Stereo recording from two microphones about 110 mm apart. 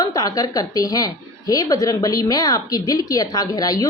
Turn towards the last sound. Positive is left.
turn(degrees=35)  # may be behind; listen again after turning